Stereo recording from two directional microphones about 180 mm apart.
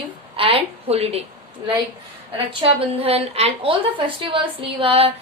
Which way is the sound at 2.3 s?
30° right (ahead or behind).